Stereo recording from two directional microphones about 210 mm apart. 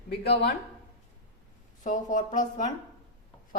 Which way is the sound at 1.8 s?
40° left (ahead or behind).